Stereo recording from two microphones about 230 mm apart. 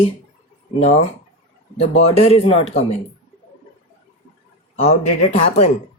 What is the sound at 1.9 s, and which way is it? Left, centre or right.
Speech, left.